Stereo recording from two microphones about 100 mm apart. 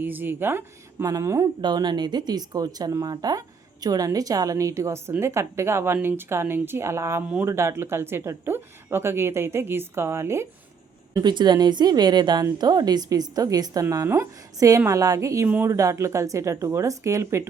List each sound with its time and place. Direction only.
0.0 s speech: 20° right (ahead or behind)
1.6 s speech: 45° right (ahead or behind); by 10.4 s 25° right (ahead or behind)
11.2 s speech: 45° right (ahead or behind); by 15.4 s 30° right (ahead or behind)
15.4 s speech: 15° right (ahead or behind)
15.7 s speech: 30° right (ahead or behind)